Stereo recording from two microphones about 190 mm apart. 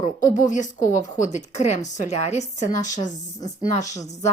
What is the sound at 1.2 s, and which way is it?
Speech, 40° left (ahead or behind).